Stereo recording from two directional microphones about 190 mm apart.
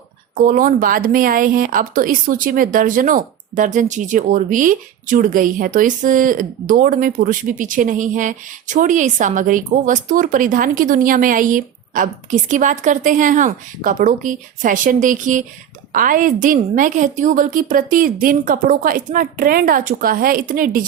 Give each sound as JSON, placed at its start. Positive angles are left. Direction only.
{"t": 0.3, "sound": "speech", "side_deg": -45}